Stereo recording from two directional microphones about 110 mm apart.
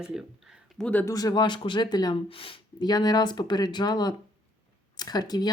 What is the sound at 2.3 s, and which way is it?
Speech, 55° left (ahead or behind).